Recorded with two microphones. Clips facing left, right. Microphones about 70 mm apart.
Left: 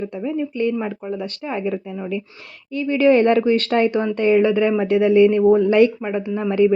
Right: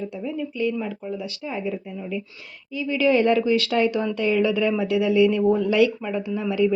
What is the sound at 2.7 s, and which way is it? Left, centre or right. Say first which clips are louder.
Speech: left 5 dB; left.